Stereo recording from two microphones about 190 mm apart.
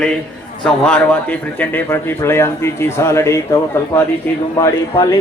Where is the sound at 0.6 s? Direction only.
5° left (ahead or behind).